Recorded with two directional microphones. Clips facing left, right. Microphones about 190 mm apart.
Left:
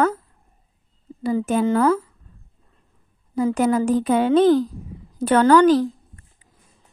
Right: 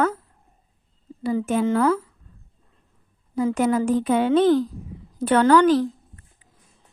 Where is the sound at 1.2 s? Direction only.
40° left (ahead or behind).